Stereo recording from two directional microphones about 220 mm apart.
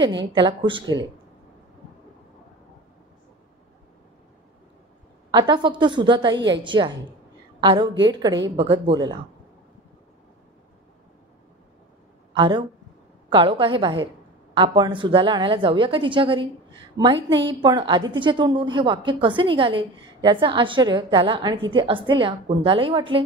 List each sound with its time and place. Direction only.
0.2 s a woman's voice: 20° right (ahead or behind)
5.5 s a woman's voice: 20° right (ahead or behind)
12.4 s a woman's voice: 20° right (ahead or behind)
17.3 s a woman's voice: 55° right (ahead or behind)
17.6 s a woman's voice: 20° right (ahead or behind)